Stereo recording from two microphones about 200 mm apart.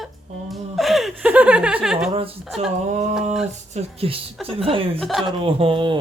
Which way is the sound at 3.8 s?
30° right (ahead or behind).